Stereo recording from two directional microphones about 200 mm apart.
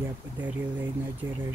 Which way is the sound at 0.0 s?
10° right (ahead or behind).